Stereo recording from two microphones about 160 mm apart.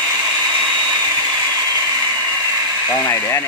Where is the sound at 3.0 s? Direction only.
10° left (ahead or behind).